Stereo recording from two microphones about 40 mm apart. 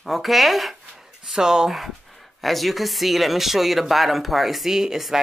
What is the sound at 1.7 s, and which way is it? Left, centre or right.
Speech, centre.